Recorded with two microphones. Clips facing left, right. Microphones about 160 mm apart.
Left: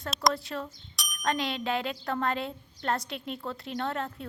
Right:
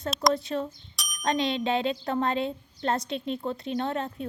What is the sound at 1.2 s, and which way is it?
Speech, 25° right (ahead or behind).